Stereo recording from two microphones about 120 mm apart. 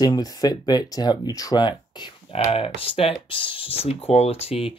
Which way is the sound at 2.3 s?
50° left (ahead or behind).